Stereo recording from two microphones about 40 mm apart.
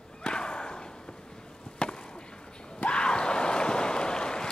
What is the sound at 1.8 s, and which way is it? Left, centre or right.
Chop, left.